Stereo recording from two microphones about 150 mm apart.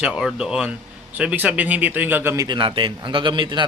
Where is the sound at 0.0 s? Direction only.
5° right (ahead or behind).